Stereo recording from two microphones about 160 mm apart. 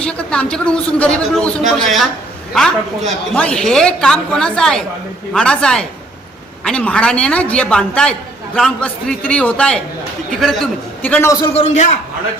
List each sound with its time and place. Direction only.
0.0 s a man's voice: 5° left (ahead or behind)
3.3 s a man's voice: 5° left (ahead or behind)
11.4 s a man's voice: 40° left (ahead or behind)